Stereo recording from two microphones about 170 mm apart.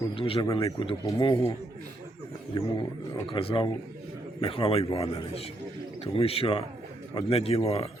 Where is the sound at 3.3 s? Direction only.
30° left (ahead or behind).